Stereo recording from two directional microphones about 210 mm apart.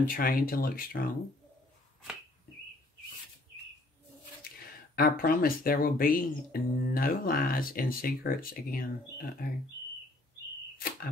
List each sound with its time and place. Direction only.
0.0 s speech: 40° left (ahead or behind)
4.5 s speech: 45° left (ahead or behind)